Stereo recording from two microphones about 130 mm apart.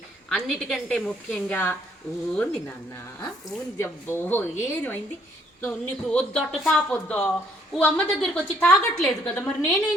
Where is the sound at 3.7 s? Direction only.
20° left (ahead or behind).